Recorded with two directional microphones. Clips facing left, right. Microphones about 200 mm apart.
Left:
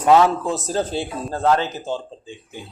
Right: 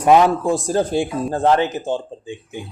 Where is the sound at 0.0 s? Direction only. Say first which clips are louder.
Right 2 dB; 15° right (ahead or behind).